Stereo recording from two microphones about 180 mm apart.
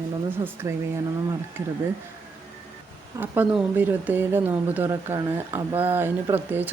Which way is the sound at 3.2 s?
10° right (ahead or behind).